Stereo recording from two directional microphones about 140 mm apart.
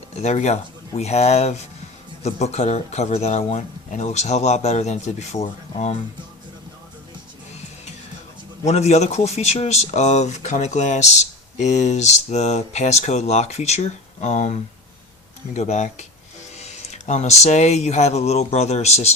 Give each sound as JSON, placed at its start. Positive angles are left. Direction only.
{"t": 0.2, "sound": "speech", "side_deg": 55}
{"t": 8.6, "sound": "speech", "side_deg": 50}